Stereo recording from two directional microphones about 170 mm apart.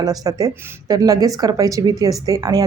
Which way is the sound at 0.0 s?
20° right (ahead or behind).